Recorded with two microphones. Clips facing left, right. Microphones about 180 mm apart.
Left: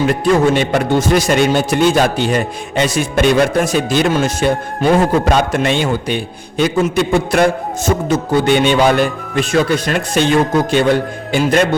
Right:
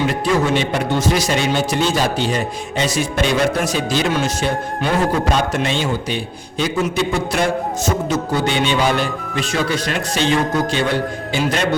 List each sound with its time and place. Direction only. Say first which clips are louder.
0.1 s a man's voice: left 5 dB; 55° left (ahead or behind)